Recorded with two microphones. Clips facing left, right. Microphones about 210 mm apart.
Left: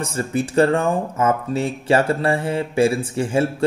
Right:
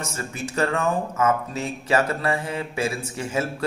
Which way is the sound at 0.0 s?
35° left (ahead or behind).